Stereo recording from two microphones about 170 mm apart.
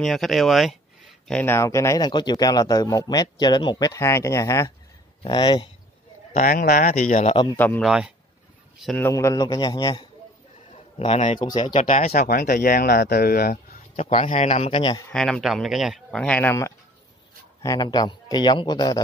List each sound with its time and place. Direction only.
0.0 s speech: centre (ahead or behind); by 5.7 s 30° left (ahead or behind)
6.3 s speech: 55° left (ahead or behind); by 7.4 s 40° left (ahead or behind)
7.5 s a man's voice: 10° left (ahead or behind)
7.8 s speech: 5° right (ahead or behind)
8.8 s speech: 10° left (ahead or behind)
11.3 s a man's voice: 25° left (ahead or behind)
12.1 s speech: 55° left (ahead or behind)
13.9 s a man's voice: 40° left (ahead or behind)
15.0 s speech: 5° left (ahead or behind); by 18.9 s 25° left (ahead or behind)